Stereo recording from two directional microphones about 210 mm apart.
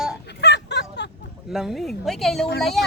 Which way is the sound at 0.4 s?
55° left (ahead or behind).